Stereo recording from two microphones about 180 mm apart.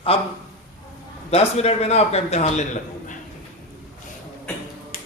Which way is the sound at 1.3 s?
35° left (ahead or behind).